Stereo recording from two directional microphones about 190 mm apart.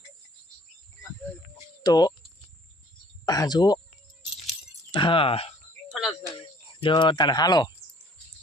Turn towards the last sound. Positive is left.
turn(degrees=20)  # may be behind; listen again after turning